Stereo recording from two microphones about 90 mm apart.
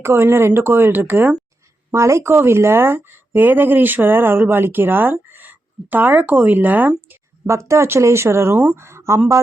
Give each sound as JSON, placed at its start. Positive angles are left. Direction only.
{"t": 0.0, "sound": "speech", "side_deg": -30}
{"t": 1.9, "sound": "speech", "side_deg": -30}
{"t": 7.4, "sound": "speech", "side_deg": -30}